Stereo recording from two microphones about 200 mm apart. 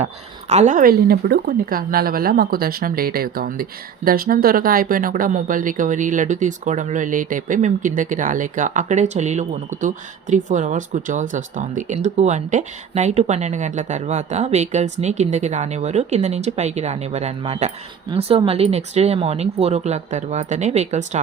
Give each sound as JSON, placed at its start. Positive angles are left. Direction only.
{"t": 0.0, "sound": "speech", "side_deg": -35}